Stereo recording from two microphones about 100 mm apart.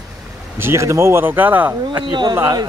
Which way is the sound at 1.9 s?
50° right (ahead or behind).